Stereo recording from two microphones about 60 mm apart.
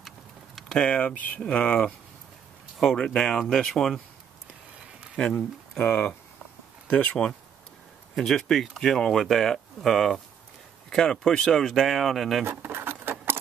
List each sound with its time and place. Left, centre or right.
0.6 s a sound: centre
0.8 s speech: left
3.0 s speech: centre
5.1 s speech: centre
8.2 s speech: centre
12.4 s keys jangling: right